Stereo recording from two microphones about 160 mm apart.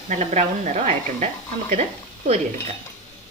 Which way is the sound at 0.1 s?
45° right (ahead or behind).